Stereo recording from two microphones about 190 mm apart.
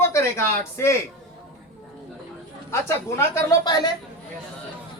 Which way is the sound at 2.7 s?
15° left (ahead or behind).